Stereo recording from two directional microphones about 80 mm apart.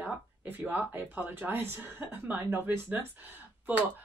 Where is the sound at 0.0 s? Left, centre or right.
Centre.